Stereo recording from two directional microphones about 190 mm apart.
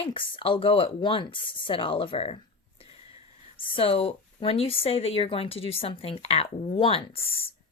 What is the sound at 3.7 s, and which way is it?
Speech, 30° left (ahead or behind).